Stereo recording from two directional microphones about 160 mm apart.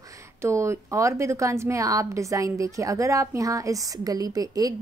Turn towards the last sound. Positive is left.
turn(degrees=-20)  # may be behind; listen again after turning